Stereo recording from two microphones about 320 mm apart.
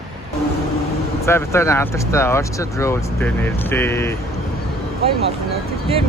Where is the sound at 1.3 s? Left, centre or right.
Centre.